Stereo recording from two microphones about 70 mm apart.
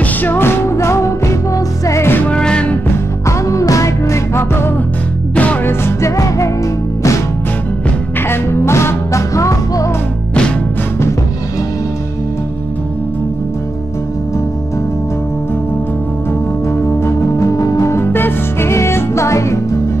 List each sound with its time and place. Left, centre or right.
0.0 s music: left
2.2 s music: centre
3.3 s music: left
5.3 s music: left
5.7 s music: left
6.1 s music: left
8.3 s music: left
16.7 s music: left